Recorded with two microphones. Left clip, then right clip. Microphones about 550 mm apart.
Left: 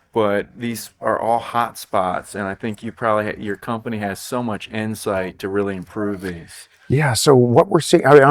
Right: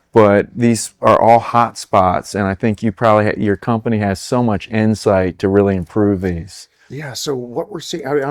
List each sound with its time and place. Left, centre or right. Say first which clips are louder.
0.1 s speech: right 8 dB; right
6.9 s speech: left 9 dB; left